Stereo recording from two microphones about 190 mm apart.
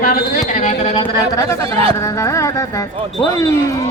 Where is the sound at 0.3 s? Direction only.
35° left (ahead or behind).